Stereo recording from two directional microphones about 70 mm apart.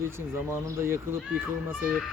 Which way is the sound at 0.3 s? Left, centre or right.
Right.